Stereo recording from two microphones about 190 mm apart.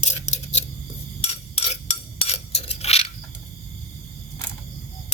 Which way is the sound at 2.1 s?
35° left (ahead or behind).